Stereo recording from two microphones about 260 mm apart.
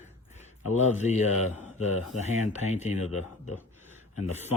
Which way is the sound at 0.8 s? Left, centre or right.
Left.